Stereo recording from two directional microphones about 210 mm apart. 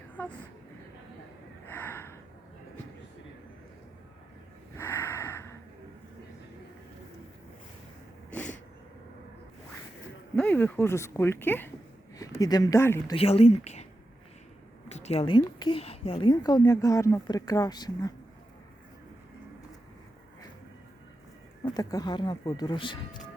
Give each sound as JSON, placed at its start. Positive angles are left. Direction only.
{"t": 1.7, "sound": "gasp", "side_deg": 10}
{"t": 4.8, "sound": "snort", "side_deg": 10}
{"t": 8.3, "sound": "a sound", "side_deg": 5}
{"t": 10.3, "sound": "speech", "side_deg": 5}
{"t": 13.1, "sound": "a woman's voice", "side_deg": 30}
{"t": 14.8, "sound": "a woman's voice", "side_deg": 30}
{"t": 21.6, "sound": "a woman's voice", "side_deg": 20}